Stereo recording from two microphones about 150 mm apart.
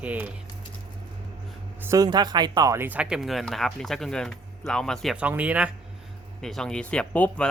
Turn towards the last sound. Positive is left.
turn(degrees=10)  # may be behind; listen again after turning